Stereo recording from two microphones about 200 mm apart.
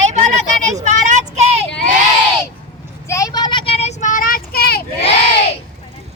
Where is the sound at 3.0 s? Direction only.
15° left (ahead or behind); by 5.1 s 50° left (ahead or behind).